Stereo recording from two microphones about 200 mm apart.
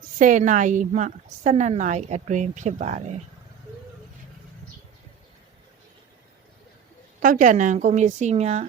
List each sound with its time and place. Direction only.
0.2 s a woman's voice: 40° right (ahead or behind)
7.2 s a woman's voice: 40° right (ahead or behind)